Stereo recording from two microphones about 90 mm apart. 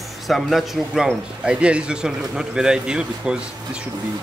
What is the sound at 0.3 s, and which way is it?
A man's voice, centre (ahead or behind).